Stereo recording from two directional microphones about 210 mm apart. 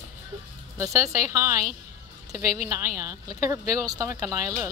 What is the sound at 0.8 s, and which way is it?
Speech, 15° right (ahead or behind).